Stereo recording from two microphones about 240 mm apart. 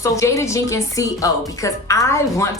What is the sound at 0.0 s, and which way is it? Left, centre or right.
A woman's voice, centre.